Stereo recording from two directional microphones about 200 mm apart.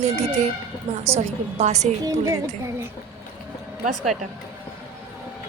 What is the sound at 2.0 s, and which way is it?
Speech, 15° right (ahead or behind).